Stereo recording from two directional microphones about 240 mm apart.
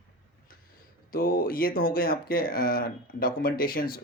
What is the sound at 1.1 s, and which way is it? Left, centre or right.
Speech, left.